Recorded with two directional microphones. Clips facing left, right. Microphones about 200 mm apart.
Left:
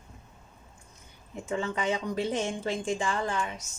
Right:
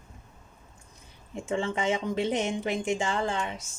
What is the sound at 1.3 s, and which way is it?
Speech, 30° right (ahead or behind).